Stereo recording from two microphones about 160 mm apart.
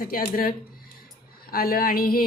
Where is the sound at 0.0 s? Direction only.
65° left (ahead or behind).